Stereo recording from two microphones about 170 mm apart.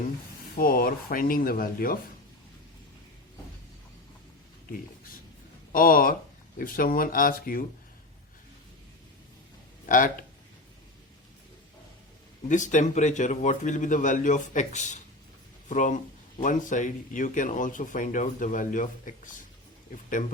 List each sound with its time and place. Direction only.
0.5 s speech: 55° left (ahead or behind)
5.7 s speech: 55° left (ahead or behind)
9.8 s speech: 50° left (ahead or behind)
12.5 s speech: 45° left (ahead or behind)